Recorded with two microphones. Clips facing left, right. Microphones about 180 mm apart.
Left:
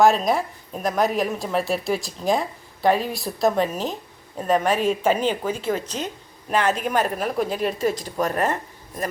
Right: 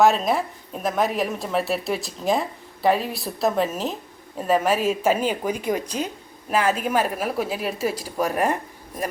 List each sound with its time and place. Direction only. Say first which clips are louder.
0.0 s a woman's voice: left 1 dB; centre (ahead or behind)